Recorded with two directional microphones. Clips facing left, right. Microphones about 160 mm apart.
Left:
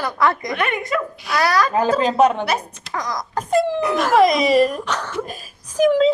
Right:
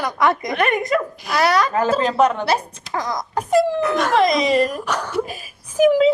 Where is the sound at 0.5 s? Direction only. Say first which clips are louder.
Right 3 dB; 40° right (ahead or behind).